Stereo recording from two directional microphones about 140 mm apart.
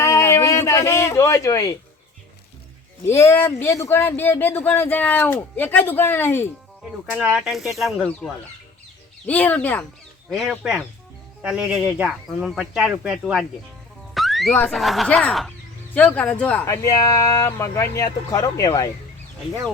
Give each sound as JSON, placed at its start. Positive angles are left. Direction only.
{"t": 0.0, "sound": "a sound", "side_deg": 20}
{"t": 3.1, "sound": "speech", "side_deg": 20}
{"t": 7.2, "sound": "speech", "side_deg": -5}
{"t": 9.2, "sound": "speech", "side_deg": 10}
{"t": 10.2, "sound": "speech", "side_deg": 0}
{"t": 14.1, "sound": "car alarm", "side_deg": 0}
{"t": 14.7, "sound": "speech", "side_deg": 0}
{"t": 16.6, "sound": "speech", "side_deg": 25}